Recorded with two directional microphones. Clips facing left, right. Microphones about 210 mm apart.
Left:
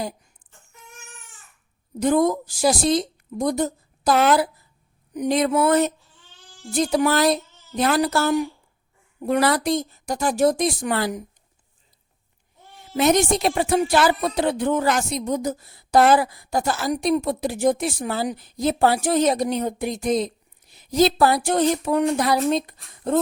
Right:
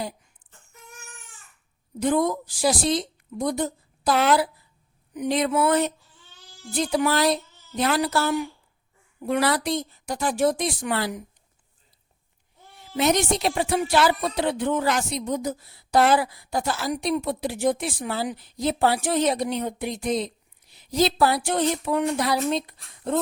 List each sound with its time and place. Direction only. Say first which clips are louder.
2.0 s speech: left 3 dB; 45° left (ahead or behind)
5.1 s a sound: left 3 dB; 40° left (ahead or behind)
6.7 s speech: left 3 dB; 45° left (ahead or behind)
13.0 s speech: left 3 dB; 45° left (ahead or behind)